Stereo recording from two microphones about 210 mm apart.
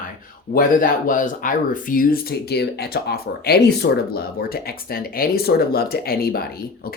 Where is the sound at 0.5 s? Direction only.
40° left (ahead or behind).